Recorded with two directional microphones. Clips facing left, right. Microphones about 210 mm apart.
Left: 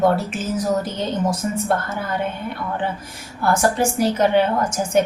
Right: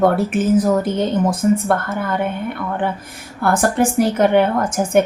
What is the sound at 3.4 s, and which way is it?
Speech, 55° right (ahead or behind).